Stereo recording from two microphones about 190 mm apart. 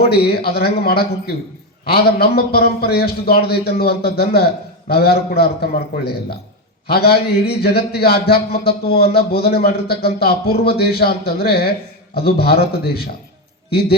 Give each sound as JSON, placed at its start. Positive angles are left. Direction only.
{"t": 0.0, "sound": "speech", "side_deg": 55}
{"t": 6.8, "sound": "speech", "side_deg": 55}